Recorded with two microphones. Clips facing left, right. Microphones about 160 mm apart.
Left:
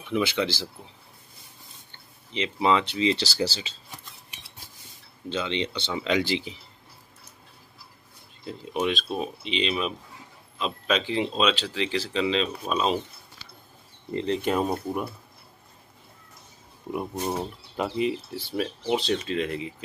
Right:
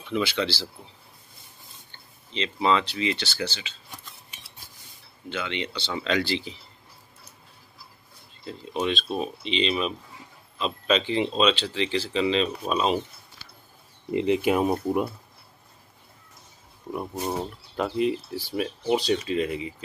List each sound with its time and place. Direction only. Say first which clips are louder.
0.0 s speech: left 1 dB; 15° left (ahead or behind)
2.3 s speech: even; 15° left (ahead or behind)
5.3 s speech: left 3 dB; 25° left (ahead or behind)
8.5 s speech: even; 10° left (ahead or behind)
14.1 s speech: right 3 dB; 10° right (ahead or behind)
17.3 s speech: even; 5° left (ahead or behind)